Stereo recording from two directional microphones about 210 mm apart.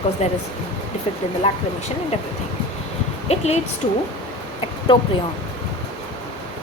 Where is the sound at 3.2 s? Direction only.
30° left (ahead or behind).